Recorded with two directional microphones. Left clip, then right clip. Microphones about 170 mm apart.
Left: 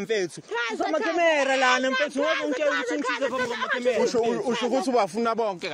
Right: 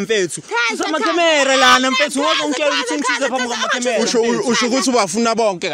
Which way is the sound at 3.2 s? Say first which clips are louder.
Right 8 dB; 80° right.